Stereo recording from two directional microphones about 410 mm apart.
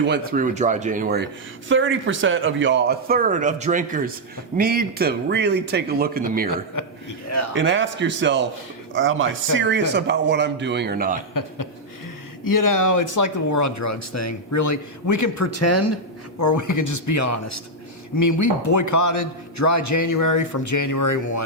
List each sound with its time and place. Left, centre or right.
0.0 s speech: right
7.5 s speech: right
11.3 s speech: left